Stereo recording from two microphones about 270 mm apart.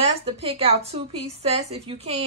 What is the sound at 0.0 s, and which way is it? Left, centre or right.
A woman's voice, right.